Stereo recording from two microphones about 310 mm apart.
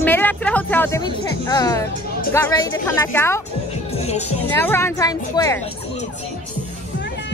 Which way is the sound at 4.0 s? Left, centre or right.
Left.